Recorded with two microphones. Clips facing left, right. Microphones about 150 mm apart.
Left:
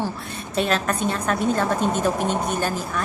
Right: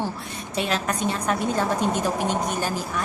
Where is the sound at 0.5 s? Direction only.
15° right (ahead or behind).